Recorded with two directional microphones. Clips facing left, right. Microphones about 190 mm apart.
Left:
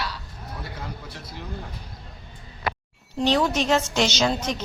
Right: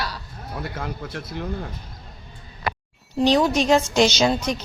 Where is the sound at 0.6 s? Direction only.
60° right (ahead or behind).